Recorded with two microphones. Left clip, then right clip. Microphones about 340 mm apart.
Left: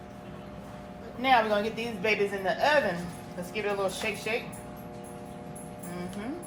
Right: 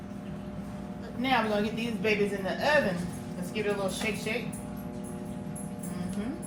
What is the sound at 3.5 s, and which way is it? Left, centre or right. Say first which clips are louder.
Speech: left 1 dB; centre.